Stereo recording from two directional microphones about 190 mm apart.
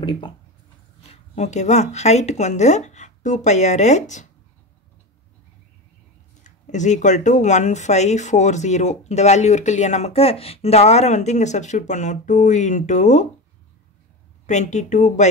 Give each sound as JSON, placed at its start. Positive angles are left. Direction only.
{"t": 0.0, "sound": "speech", "side_deg": 25}
{"t": 6.4, "sound": "speech", "side_deg": 40}
{"t": 14.4, "sound": "speech", "side_deg": 40}